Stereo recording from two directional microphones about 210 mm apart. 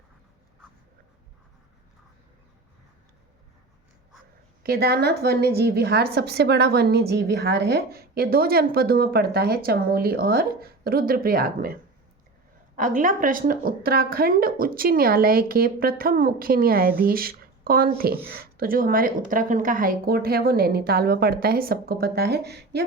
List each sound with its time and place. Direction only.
4.6 s a woman's voice: 45° right (ahead or behind)
12.7 s a woman's voice: 40° right (ahead or behind)